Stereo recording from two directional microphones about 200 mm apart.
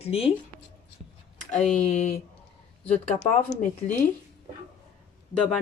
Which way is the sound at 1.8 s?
35° left (ahead or behind).